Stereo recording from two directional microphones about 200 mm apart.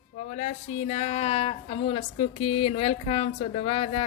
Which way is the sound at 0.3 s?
35° left (ahead or behind).